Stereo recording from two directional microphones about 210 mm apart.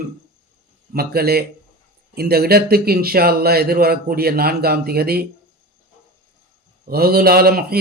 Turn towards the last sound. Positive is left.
turn(degrees=-45)  # may be behind; listen again after turning